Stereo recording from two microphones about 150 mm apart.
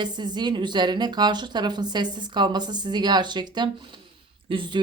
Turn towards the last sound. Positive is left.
turn(degrees=-35)  # may be behind; listen again after turning